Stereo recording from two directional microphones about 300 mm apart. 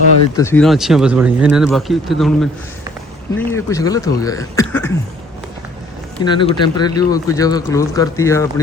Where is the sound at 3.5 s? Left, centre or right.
Centre.